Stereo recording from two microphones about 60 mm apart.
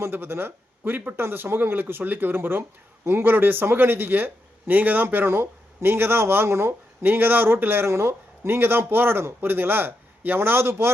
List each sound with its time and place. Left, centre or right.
0.0 s speech: right
7.0 s speech: right